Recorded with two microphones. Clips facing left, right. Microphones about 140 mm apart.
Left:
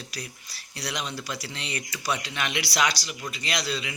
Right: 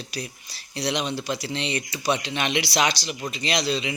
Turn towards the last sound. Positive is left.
turn(degrees=-20)  # may be behind; listen again after turning